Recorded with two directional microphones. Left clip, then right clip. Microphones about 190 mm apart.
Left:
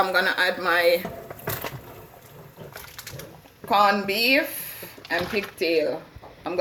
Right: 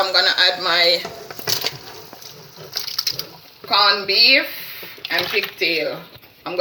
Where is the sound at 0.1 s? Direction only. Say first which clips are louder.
Right 6 dB; 45° left (ahead or behind).